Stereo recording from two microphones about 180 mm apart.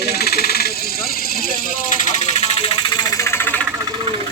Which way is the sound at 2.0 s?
35° left (ahead or behind).